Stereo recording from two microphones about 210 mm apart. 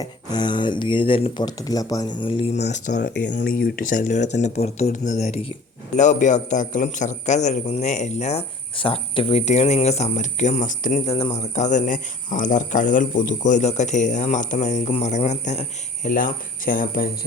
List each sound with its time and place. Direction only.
0.0 s speech: 20° left (ahead or behind); by 3.0 s 35° left (ahead or behind)
3.2 s a man's voice: 50° left (ahead or behind)